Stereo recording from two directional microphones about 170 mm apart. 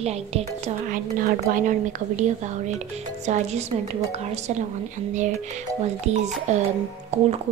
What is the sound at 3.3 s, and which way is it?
Speech, 45° right (ahead or behind).